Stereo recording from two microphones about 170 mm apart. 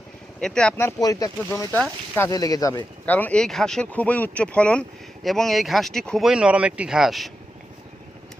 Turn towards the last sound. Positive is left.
turn(degrees=0)  # may be behind; listen again after turning